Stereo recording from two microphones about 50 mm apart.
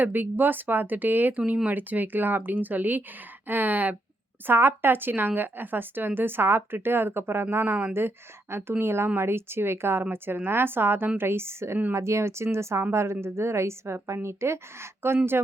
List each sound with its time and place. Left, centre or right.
0.0 s speech: right
4.4 s a woman's voice: right
11.9 s a woman's voice: right